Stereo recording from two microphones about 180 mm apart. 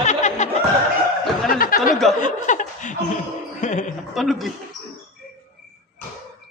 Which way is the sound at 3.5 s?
40° left (ahead or behind).